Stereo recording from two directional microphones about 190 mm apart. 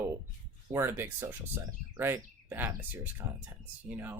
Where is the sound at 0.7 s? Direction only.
15° right (ahead or behind).